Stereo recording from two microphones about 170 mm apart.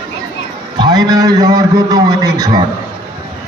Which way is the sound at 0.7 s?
25° right (ahead or behind).